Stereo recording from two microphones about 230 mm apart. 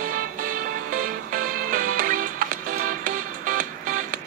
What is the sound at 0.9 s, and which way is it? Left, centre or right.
Music, right.